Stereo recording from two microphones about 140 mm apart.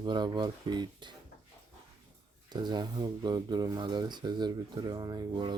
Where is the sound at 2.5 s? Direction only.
30° right (ahead or behind).